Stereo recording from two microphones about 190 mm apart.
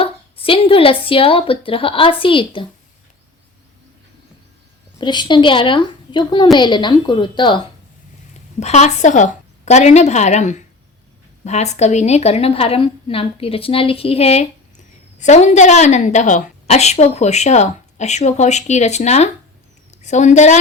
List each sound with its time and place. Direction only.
0.0 s speech: 30° left (ahead or behind)
4.9 s speech: 25° left (ahead or behind)
8.3 s a woman's voice: 35° left (ahead or behind)